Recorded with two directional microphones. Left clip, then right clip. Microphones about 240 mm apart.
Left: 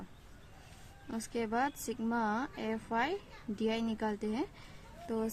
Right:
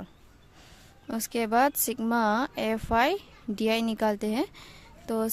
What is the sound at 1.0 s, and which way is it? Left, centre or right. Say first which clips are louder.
Speech: right 8 dB; right.